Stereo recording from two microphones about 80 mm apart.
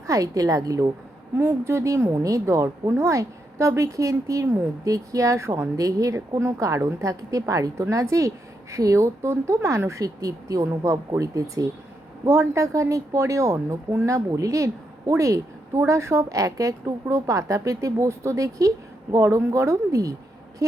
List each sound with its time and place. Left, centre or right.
0.1 s a woman's voice: right
1.4 s a woman's voice: right